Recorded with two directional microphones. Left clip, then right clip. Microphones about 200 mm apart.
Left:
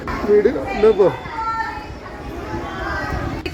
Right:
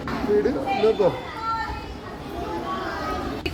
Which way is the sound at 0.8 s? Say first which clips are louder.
Left 7 dB; 55° left (ahead or behind).